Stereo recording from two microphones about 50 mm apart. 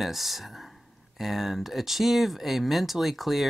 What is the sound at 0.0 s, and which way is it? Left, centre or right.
Speech, centre.